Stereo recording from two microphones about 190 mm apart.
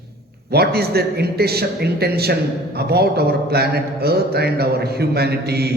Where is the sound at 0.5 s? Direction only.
55° right (ahead or behind).